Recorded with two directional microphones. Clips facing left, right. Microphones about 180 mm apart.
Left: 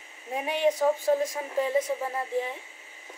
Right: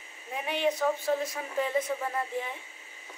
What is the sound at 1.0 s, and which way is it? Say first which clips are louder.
Speech: left 4 dB; 45° left (ahead or behind).